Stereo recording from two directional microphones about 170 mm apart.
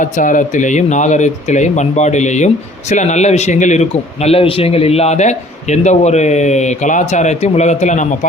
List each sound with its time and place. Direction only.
0.0 s a man's voice: 50° left (ahead or behind)